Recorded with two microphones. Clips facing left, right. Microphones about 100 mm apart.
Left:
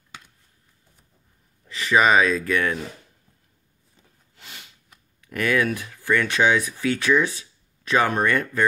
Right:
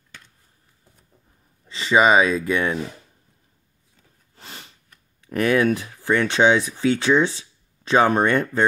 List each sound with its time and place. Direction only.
1.7 s speech: 25° right (ahead or behind)
4.4 s a sound: 35° right (ahead or behind)
5.2 s speech: 25° right (ahead or behind)